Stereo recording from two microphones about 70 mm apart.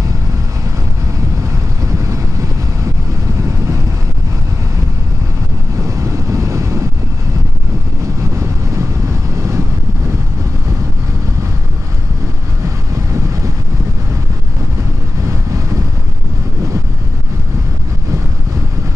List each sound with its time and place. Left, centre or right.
1.9 s vehicle: right
5.9 s vehicle: right